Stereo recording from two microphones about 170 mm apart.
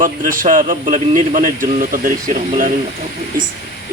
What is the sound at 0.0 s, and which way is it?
Speech, 55° right (ahead or behind).